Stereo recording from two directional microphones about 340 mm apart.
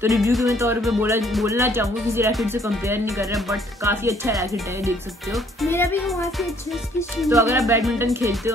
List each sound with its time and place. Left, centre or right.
0.0 s speech: centre
7.2 s speech: centre